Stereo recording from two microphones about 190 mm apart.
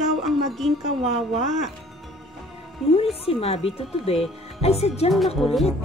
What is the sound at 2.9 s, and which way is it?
Speech, 30° left (ahead or behind).